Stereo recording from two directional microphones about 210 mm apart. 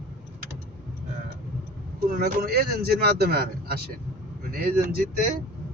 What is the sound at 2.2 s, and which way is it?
Speech, 50° right (ahead or behind).